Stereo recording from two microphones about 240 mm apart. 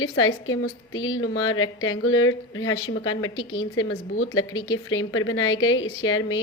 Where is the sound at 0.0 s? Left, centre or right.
Left.